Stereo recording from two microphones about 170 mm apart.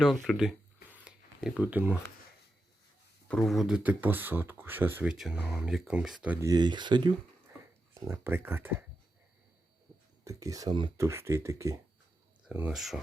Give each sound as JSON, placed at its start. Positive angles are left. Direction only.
{"t": 0.0, "sound": "a sound", "side_deg": 0}
{"t": 3.2, "sound": "speech", "side_deg": 0}
{"t": 6.5, "sound": "speech", "side_deg": -25}
{"t": 8.1, "sound": "speech", "side_deg": -10}
{"t": 10.2, "sound": "speech", "side_deg": -20}
{"t": 10.9, "sound": "speech", "side_deg": -15}